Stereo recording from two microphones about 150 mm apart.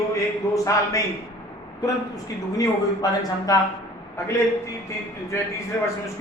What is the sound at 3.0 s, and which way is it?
Speech, 25° left (ahead or behind).